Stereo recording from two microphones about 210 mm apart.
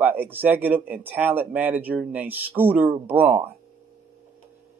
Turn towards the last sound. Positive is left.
turn(degrees=-10)  # may be behind; listen again after turning